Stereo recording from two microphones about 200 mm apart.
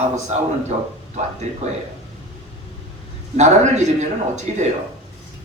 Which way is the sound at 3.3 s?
35° right (ahead or behind).